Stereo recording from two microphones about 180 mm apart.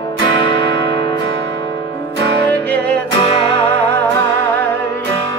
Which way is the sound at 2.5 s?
10° left (ahead or behind).